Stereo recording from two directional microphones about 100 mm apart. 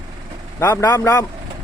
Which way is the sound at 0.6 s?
35° left (ahead or behind).